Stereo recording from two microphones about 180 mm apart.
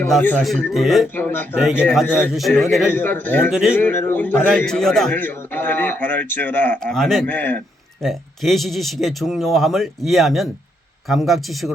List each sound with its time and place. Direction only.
0.0 s a man's voice: 10° left (ahead or behind)
1.1 s a man's voice: 10° left (ahead or behind)
1.5 s speech: centre (ahead or behind)
2.9 s a man's voice: 10° left (ahead or behind)
3.5 s speech: centre (ahead or behind)
3.8 s a man's voice: 10° left (ahead or behind)